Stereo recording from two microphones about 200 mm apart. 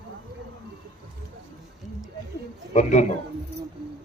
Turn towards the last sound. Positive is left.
turn(degrees=35)  # may be behind; listen again after turning